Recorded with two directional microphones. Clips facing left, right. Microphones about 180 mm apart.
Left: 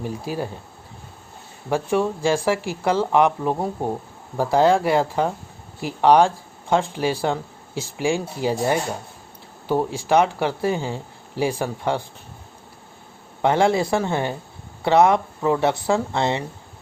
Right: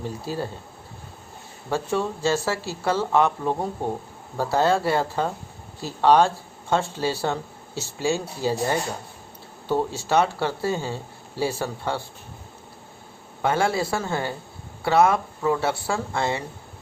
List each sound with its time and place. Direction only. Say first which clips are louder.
0.0 s speech: left 2 dB; 15° left (ahead or behind)
1.7 s speech: left 4 dB; 10° left (ahead or behind)
13.4 s speech: left 4 dB; 20° left (ahead or behind)